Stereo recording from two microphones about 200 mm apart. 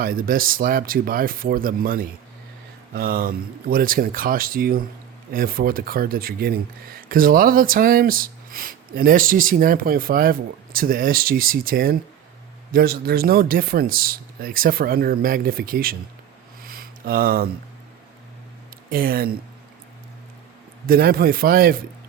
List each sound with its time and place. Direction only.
0.0 s speech: 45° right (ahead or behind)
16.6 s a sound: 45° right (ahead or behind)
18.9 s speech: 45° right (ahead or behind)
20.8 s speech: 50° right (ahead or behind)